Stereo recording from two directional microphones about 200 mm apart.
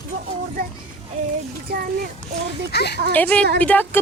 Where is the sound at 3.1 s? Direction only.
10° left (ahead or behind).